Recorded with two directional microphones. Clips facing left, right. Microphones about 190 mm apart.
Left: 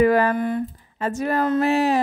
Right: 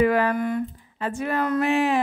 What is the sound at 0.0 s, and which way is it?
A woman's voice, 40° left (ahead or behind).